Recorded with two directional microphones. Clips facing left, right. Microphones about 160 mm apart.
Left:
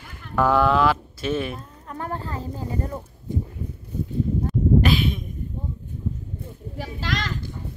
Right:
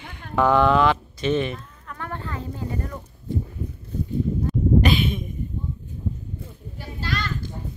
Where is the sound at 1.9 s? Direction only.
35° left (ahead or behind).